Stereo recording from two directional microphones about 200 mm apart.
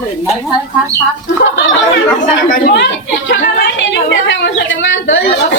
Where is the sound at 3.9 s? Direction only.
60° left (ahead or behind).